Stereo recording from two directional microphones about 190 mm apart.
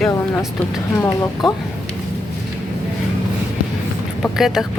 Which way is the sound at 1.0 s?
15° left (ahead or behind).